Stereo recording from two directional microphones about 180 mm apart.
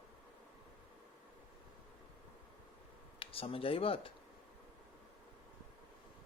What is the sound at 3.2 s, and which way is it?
Speech, 30° left (ahead or behind).